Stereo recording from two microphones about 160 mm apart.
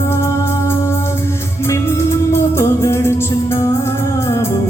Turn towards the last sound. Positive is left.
turn(degrees=15)  # may be behind; listen again after turning